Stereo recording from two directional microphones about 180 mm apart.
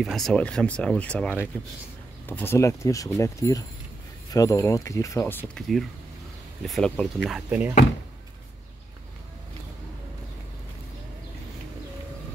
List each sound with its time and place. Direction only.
0.0 s speech: centre (ahead or behind)